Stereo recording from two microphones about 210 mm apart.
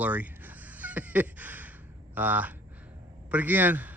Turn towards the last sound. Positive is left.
turn(degrees=-10)  # may be behind; listen again after turning